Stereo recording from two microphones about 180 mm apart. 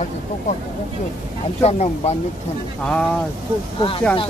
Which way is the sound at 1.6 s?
35° left (ahead or behind).